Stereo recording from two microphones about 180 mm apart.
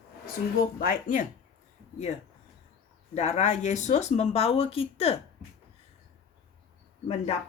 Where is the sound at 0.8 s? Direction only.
50° left (ahead or behind).